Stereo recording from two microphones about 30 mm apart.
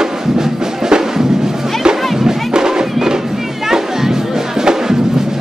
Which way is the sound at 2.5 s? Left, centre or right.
Right.